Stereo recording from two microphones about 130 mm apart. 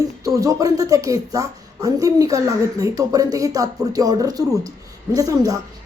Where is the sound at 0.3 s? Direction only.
25° right (ahead or behind).